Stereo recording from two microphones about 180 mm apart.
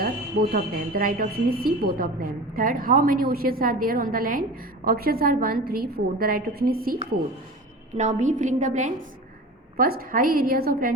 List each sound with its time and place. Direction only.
0.0 s a woman's voice: 55° right (ahead or behind)
7.9 s a woman's voice: 40° right (ahead or behind)
9.7 s a woman's voice: 55° right (ahead or behind)